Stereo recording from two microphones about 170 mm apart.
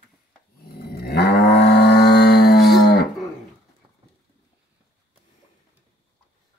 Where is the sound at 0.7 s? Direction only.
70° left (ahead or behind).